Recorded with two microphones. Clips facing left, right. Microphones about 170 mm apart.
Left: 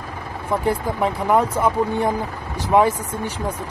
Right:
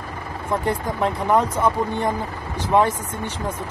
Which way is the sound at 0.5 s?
5° left (ahead or behind).